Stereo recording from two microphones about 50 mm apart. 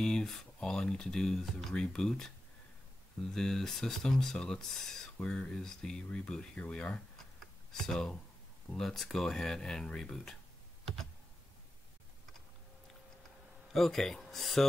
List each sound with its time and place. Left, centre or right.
0.0 s speech: centre
1.7 s speech: centre
5.2 s speech: centre
6.0 s speech: left
6.3 s speech: centre
13.7 s speech: centre